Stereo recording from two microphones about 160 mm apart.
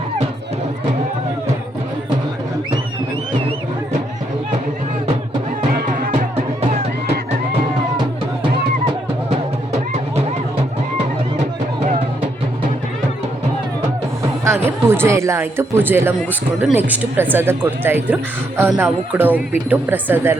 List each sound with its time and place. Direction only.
5.7 s music: 65° right (ahead or behind)
14.4 s speech: 15° right (ahead or behind)